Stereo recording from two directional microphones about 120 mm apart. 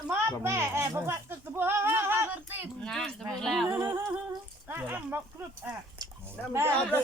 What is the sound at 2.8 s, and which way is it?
Speech, 5° left (ahead or behind).